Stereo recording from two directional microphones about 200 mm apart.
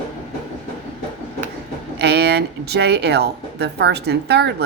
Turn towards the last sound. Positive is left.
turn(degrees=-55)  # may be behind; listen again after turning